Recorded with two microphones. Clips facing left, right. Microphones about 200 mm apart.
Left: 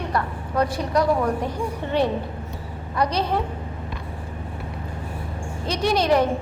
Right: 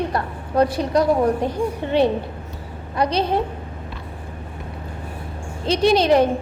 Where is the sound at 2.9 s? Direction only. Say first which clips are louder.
Right 3 dB; 25° right (ahead or behind).